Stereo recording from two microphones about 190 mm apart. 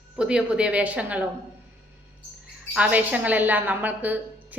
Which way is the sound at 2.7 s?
5° right (ahead or behind).